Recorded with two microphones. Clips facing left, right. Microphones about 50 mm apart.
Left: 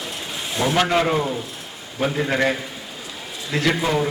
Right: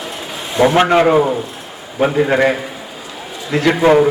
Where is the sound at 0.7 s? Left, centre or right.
Right.